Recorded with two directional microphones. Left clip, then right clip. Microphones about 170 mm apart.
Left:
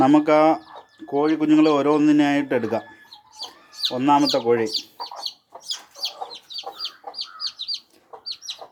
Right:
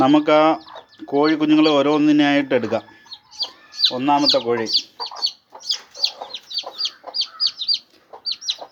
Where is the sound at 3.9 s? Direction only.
30° left (ahead or behind).